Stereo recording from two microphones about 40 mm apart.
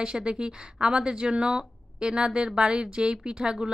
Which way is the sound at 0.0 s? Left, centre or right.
Right.